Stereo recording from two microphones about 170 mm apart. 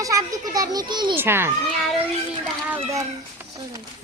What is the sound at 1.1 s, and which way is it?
Speech, 15° right (ahead or behind).